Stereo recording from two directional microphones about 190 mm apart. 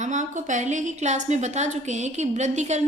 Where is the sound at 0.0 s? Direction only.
40° right (ahead or behind).